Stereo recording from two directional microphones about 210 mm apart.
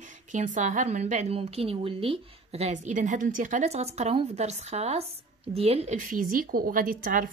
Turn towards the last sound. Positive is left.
turn(degrees=-40)  # may be behind; listen again after turning